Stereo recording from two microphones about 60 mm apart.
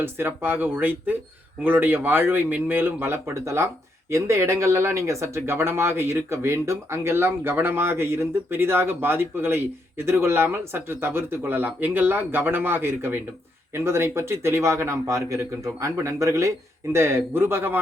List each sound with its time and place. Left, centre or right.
0.0 s speech: right